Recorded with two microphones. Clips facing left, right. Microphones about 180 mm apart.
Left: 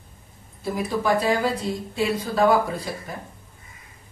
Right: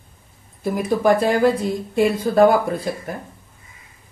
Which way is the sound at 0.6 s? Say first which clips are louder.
Right 6 dB; 55° right (ahead or behind).